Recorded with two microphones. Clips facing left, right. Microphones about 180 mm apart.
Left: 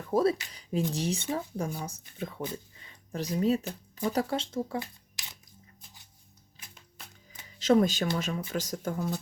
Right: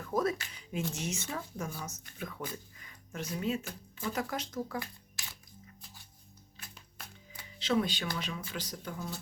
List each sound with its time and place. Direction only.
0.1 s speech: 30° left (ahead or behind)
7.6 s speech: 45° left (ahead or behind)